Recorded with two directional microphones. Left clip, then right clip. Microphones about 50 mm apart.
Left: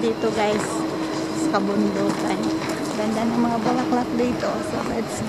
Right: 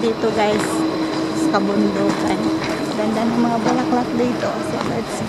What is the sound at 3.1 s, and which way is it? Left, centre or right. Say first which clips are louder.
Speech: right 3 dB; centre.